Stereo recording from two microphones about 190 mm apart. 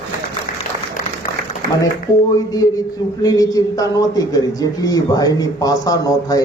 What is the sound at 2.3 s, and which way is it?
A man's voice, 20° left (ahead or behind).